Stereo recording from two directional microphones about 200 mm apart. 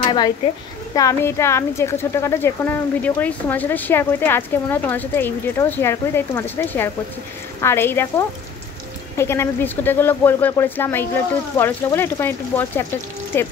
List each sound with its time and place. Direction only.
0.0 s speech: 20° left (ahead or behind)